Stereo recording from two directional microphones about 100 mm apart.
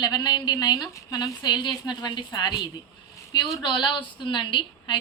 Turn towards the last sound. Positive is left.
turn(degrees=50)  # may be behind; listen again after turning